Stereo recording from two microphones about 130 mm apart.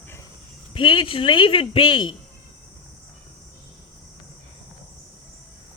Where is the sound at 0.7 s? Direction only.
40° left (ahead or behind).